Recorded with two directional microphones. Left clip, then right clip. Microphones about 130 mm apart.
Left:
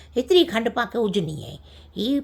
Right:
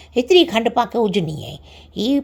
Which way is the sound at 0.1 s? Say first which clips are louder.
Right 5 dB; 25° right (ahead or behind).